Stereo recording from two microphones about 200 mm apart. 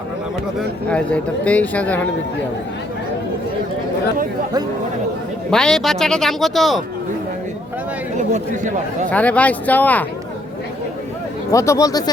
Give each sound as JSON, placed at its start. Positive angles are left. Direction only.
{"t": 0.9, "sound": "speech", "side_deg": 5}
{"t": 5.5, "sound": "speech", "side_deg": 5}
{"t": 9.0, "sound": "speech", "side_deg": 5}
{"t": 11.5, "sound": "speech", "side_deg": 15}